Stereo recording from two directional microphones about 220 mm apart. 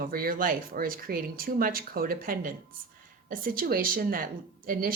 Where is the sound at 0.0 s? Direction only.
40° right (ahead or behind).